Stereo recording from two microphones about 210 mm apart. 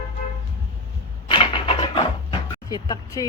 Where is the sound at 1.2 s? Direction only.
25° left (ahead or behind).